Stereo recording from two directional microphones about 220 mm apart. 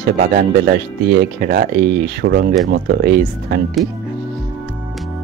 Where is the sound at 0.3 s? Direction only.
45° right (ahead or behind).